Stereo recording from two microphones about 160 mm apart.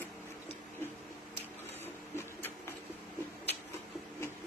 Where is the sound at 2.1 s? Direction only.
15° left (ahead or behind).